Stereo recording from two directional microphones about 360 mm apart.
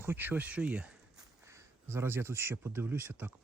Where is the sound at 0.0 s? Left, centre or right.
Centre.